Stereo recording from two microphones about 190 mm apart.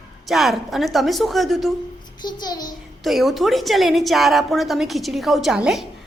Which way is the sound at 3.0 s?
Centre (ahead or behind).